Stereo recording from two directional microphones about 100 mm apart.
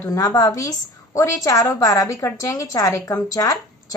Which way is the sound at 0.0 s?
35° left (ahead or behind).